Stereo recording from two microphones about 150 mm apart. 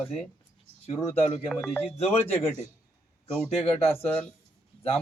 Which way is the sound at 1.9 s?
45° left (ahead or behind).